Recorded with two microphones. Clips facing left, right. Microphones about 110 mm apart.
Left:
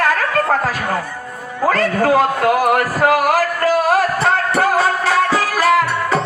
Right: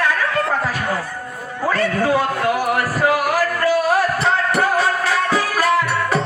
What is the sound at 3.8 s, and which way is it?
Music, 45° left (ahead or behind).